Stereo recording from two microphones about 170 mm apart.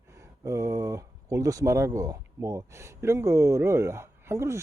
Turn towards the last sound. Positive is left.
turn(degrees=-15)  # may be behind; listen again after turning